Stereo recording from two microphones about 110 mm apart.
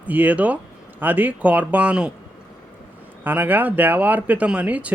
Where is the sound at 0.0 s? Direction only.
15° right (ahead or behind).